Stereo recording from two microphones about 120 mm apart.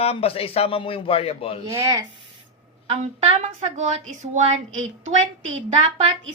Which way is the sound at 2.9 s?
65° right (ahead or behind).